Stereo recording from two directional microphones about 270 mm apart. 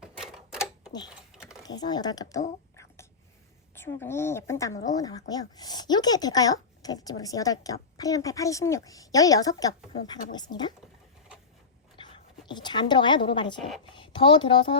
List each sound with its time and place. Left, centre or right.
0.0 s typewriter: centre
0.6 s a sound: centre
1.6 s speech: centre
11.9 s a sound: centre
13.6 s speech: centre
13.9 s a woman's voice: centre